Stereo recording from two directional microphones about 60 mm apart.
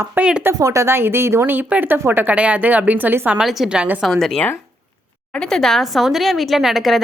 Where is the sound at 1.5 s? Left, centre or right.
Right.